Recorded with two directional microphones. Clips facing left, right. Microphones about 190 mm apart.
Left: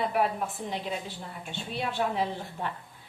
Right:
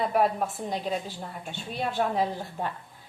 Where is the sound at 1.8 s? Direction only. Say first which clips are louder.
Right 3 dB; 45° right (ahead or behind).